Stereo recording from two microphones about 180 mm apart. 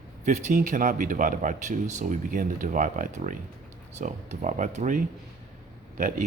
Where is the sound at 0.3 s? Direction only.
45° right (ahead or behind).